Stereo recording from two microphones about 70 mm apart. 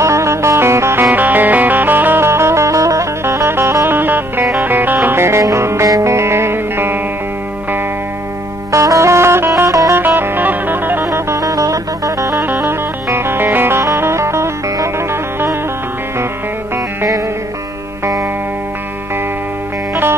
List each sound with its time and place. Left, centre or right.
0.0 s music: right
1.1 s music: right
3.4 s music: right
5.9 s music: right
6.1 s music: right
8.7 s music: right
9.9 s music: right
11.1 s music: right
12.4 s music: right